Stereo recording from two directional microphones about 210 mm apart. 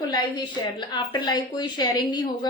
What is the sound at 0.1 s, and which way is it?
A woman's voice, 20° left (ahead or behind).